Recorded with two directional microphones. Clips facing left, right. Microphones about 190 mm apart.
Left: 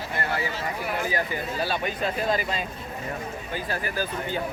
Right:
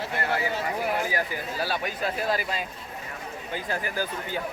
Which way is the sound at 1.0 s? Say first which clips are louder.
Left 1 dB; 10° right (ahead or behind).